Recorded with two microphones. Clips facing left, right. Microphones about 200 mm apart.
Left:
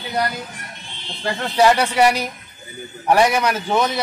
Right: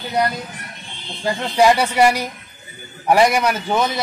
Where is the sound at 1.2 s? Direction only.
10° right (ahead or behind).